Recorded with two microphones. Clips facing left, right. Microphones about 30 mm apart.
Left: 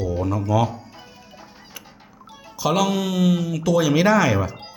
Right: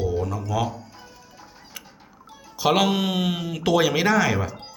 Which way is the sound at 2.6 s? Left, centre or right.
Right.